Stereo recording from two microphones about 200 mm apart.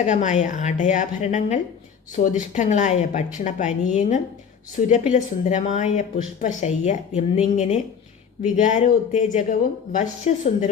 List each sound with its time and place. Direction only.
0.0 s speech: 35° left (ahead or behind)